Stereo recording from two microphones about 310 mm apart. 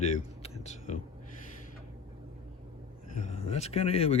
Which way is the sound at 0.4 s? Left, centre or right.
Left.